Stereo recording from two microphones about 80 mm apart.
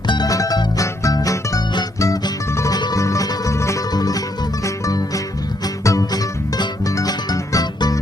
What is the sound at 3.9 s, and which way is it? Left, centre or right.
Music, left.